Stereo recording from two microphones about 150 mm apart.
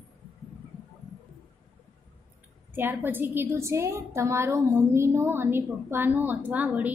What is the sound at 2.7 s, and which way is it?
A woman's voice, 15° right (ahead or behind).